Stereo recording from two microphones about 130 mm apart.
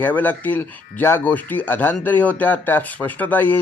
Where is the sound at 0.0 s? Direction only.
15° left (ahead or behind).